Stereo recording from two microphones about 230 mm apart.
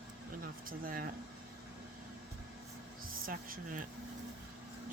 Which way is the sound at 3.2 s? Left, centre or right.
Right.